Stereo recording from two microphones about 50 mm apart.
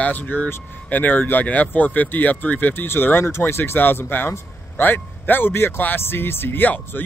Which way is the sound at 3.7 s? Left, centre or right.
Left.